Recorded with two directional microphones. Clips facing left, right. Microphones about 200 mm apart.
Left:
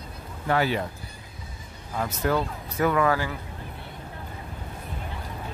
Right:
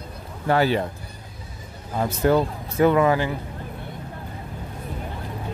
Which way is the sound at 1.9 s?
30° right (ahead or behind).